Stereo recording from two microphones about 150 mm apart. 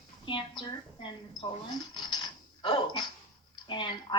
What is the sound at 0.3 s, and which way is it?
Speech, 35° left (ahead or behind).